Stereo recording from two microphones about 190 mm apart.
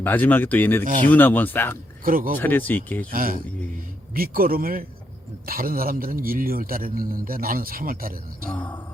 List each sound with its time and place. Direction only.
0.0 s speech: 10° left (ahead or behind)
2.0 s a man's voice: 45° right (ahead or behind)
2.4 s speech: 10° left (ahead or behind)
3.1 s a man's voice: 50° right (ahead or behind)
8.4 s speech: 10° left (ahead or behind)